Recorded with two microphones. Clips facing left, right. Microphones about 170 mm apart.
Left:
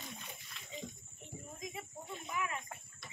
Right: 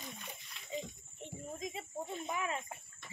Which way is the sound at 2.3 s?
25° right (ahead or behind).